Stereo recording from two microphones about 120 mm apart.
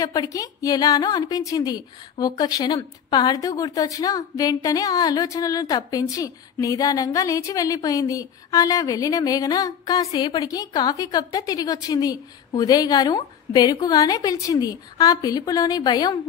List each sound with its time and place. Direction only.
0.0 s a woman's voice: 30° left (ahead or behind)